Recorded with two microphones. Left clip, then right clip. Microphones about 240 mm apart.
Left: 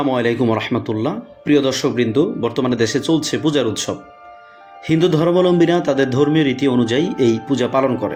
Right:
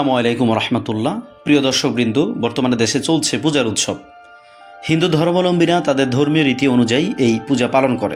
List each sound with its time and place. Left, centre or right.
0.0 s speech: centre